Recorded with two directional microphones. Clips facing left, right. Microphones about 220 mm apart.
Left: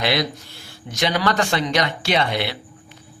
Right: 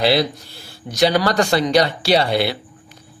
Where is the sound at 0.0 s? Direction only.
30° right (ahead or behind).